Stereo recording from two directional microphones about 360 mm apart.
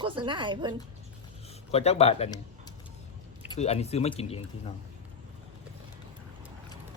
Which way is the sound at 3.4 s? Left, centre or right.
Centre.